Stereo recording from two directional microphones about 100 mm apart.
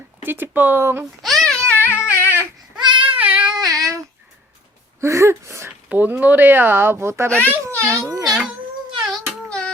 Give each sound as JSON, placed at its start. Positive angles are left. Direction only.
{"t": 0.2, "sound": "speech", "side_deg": -20}
{"t": 1.2, "sound": "babbling", "side_deg": 5}
{"t": 1.8, "sound": "a sound", "side_deg": 25}
{"t": 2.8, "sound": "child singing", "side_deg": -55}
{"t": 3.2, "sound": "a sound", "side_deg": -10}
{"t": 3.6, "sound": "child singing", "side_deg": -35}
{"t": 4.9, "sound": "speech", "side_deg": -30}
{"t": 5.9, "sound": "speech", "side_deg": -15}
{"t": 7.3, "sound": "a child's voice", "side_deg": 15}
{"t": 7.8, "sound": "a child's voice", "side_deg": -25}
{"t": 8.2, "sound": "a sound", "side_deg": -5}
{"t": 9.5, "sound": "music", "side_deg": 10}